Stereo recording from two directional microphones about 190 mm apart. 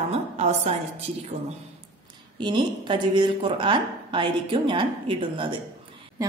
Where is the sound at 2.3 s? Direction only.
25° right (ahead or behind).